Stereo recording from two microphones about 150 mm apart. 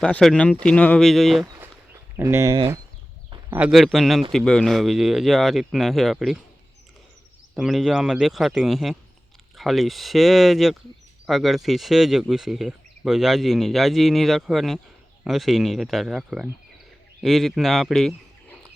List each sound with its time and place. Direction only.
0.0 s speech: 5° left (ahead or behind)
2.1 s speech: 20° right (ahead or behind)
3.5 s speech: 5° right (ahead or behind)
7.5 s speech: centre (ahead or behind)